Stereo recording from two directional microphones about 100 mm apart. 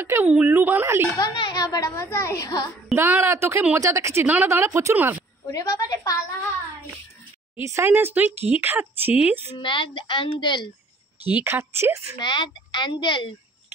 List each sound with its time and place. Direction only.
0.0 s speech: 25° right (ahead or behind)
1.3 s a woman's voice: 50° left (ahead or behind)
2.0 s a woman's voice: 30° left (ahead or behind)
3.0 s speech: 25° right (ahead or behind)
5.5 s a woman's voice: 35° left (ahead or behind)
7.6 s speech: 25° right (ahead or behind)
9.6 s speech: 55° left (ahead or behind)
11.3 s speech: 20° right (ahead or behind)
12.2 s speech: 50° left (ahead or behind)